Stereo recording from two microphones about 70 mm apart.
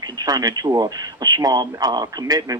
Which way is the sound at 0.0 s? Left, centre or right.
Right.